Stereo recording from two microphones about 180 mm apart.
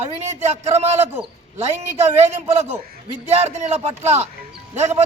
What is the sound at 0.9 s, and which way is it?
Speech, 10° right (ahead or behind).